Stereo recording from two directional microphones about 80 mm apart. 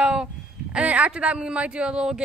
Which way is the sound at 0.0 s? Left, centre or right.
Centre.